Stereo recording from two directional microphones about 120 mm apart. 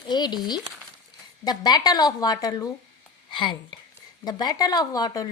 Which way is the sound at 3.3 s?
40° left (ahead or behind).